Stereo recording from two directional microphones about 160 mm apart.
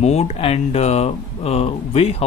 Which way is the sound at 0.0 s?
40° left (ahead or behind).